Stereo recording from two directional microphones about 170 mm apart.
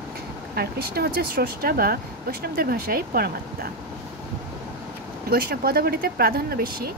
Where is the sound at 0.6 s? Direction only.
65° right (ahead or behind).